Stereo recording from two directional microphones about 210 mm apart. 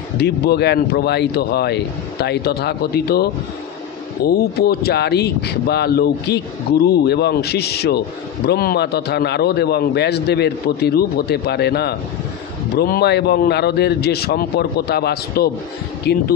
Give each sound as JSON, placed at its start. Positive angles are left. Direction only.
{"t": 0.2, "sound": "speech", "side_deg": 50}